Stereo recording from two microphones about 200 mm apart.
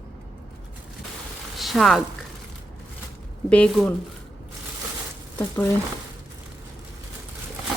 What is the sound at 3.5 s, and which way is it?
Speech, 5° left (ahead or behind).